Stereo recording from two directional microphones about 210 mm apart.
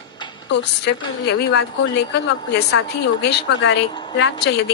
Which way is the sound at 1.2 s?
55° left (ahead or behind).